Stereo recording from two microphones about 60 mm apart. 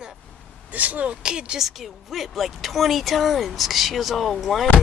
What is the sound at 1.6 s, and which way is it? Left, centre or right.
Speech, centre.